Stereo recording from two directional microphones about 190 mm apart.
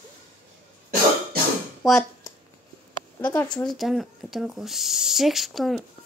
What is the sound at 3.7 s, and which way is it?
Speech, centre (ahead or behind).